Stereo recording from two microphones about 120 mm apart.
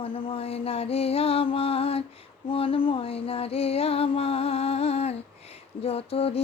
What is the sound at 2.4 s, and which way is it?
Music, 50° left (ahead or behind).